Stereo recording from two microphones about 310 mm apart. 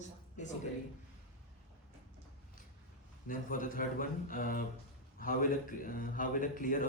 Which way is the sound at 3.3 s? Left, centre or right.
Left.